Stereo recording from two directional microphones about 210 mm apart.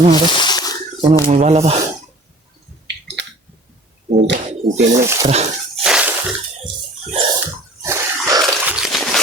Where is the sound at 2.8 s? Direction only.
55° right (ahead or behind).